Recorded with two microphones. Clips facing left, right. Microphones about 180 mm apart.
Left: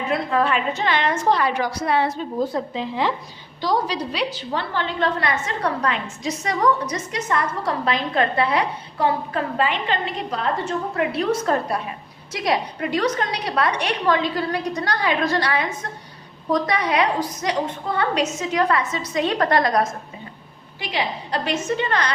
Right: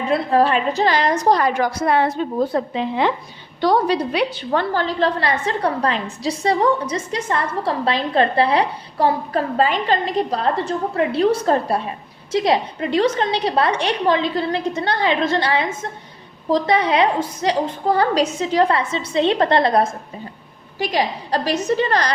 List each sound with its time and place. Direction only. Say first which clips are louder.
0.1 s a woman's voice: right 5 dB; 35° right (ahead or behind); by 4.6 s 60° right (ahead or behind)
4.7 s a woman's voice: right 4 dB; 40° right (ahead or behind)
20.7 s a woman's voice: right 5 dB; 40° right (ahead or behind)